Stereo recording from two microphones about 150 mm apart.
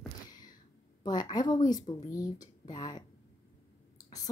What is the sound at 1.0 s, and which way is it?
A woman's voice, 30° left (ahead or behind).